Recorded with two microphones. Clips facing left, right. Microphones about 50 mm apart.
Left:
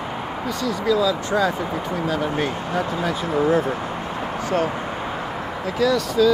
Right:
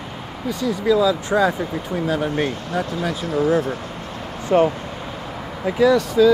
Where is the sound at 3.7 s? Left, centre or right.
Left.